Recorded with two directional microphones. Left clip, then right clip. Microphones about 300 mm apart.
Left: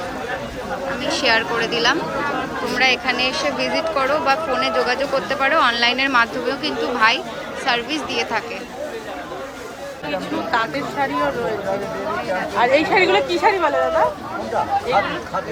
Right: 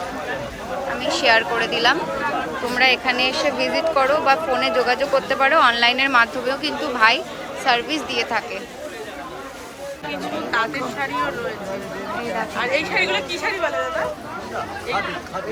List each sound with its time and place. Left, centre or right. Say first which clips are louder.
1.0 s speech: right 1 dB; centre
10.3 s speech: left 1 dB; centre
12.5 s speech: left 6 dB; centre